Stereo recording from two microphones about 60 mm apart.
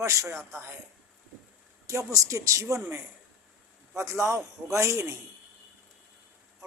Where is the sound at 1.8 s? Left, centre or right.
Right.